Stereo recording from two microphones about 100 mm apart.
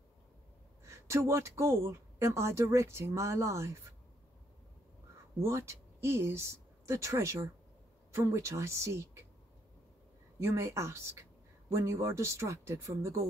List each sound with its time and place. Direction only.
0.8 s speech: 30° right (ahead or behind)
5.4 s speech: 30° right (ahead or behind)
10.4 s speech: 25° right (ahead or behind)